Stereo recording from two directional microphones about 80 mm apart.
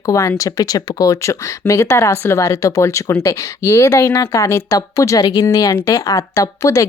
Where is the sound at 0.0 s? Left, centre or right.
Left.